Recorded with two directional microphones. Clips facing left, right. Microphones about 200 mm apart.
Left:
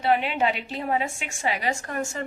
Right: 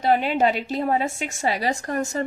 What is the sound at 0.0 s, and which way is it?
A woman's voice, 40° right (ahead or behind).